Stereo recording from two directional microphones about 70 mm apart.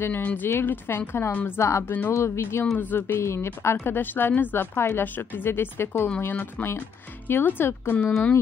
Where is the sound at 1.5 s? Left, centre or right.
Left.